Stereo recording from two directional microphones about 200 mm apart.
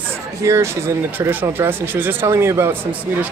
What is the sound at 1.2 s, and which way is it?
Speech, 10° right (ahead or behind).